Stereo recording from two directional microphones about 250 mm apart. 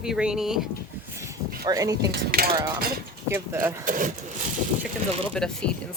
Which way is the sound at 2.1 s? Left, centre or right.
Right.